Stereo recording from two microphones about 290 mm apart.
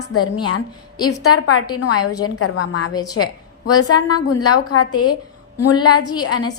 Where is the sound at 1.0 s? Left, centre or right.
Left.